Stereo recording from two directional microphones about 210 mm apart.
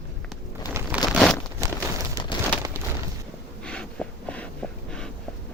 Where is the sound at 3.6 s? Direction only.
5° left (ahead or behind).